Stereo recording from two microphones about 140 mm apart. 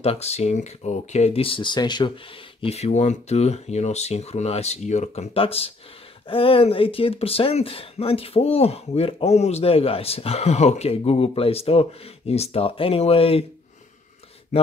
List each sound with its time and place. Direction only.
0.0 s speech: 45° left (ahead or behind)
2.6 s speech: 50° left (ahead or behind)